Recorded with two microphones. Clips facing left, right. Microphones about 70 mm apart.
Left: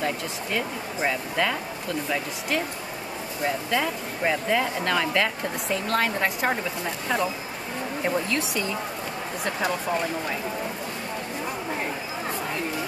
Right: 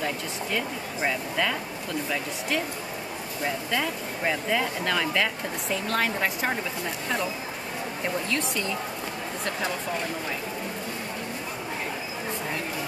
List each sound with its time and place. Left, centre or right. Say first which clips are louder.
0.0 s speech: left 2 dB; centre
8.0 s speech: left 3 dB; centre